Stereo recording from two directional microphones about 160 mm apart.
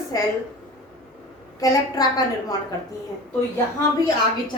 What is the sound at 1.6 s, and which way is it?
Speech, 25° left (ahead or behind).